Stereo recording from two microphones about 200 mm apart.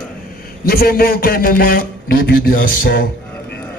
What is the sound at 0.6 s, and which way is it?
A man's voice, 50° left (ahead or behind).